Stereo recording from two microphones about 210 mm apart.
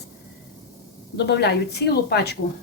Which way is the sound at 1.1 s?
55° left (ahead or behind).